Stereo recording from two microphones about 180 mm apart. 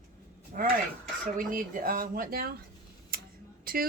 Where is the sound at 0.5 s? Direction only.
50° right (ahead or behind).